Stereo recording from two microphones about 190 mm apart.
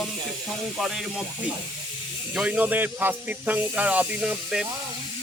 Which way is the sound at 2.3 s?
5° right (ahead or behind).